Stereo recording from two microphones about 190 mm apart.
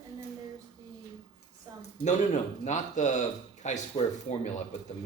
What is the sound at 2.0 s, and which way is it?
A man's voice, 40° left (ahead or behind).